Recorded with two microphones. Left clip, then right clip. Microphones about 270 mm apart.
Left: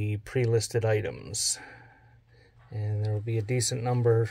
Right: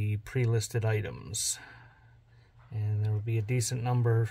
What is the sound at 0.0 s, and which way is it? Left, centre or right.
Speech, centre.